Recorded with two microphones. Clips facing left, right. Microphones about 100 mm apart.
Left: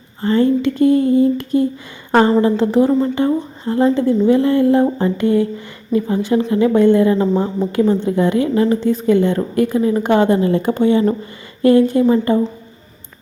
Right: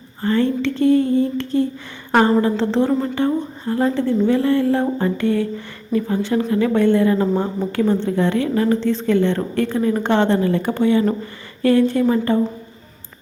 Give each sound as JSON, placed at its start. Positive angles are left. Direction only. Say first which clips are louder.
{"t": 0.2, "sound": "a woman's voice", "louder": "left 4 dB", "side_deg": 20}